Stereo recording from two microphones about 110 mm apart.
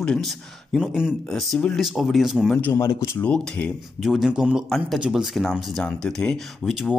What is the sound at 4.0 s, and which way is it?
Speech, centre (ahead or behind).